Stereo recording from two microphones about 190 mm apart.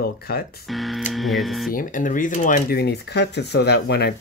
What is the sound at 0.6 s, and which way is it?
Speech, centre (ahead or behind).